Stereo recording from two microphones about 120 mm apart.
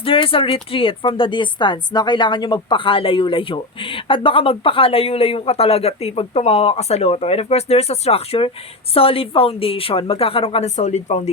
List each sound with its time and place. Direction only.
0.0 s a woman's voice: 50° left (ahead or behind)
10.8 s speech: 75° left (ahead or behind)